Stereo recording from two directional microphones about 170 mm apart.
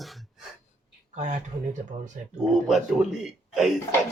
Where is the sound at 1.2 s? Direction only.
45° right (ahead or behind).